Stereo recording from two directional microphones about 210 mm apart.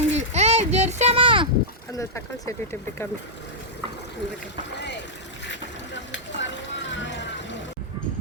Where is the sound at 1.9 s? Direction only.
15° left (ahead or behind).